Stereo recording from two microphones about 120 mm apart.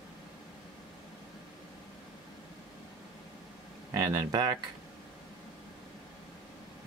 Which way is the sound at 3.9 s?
30° right (ahead or behind).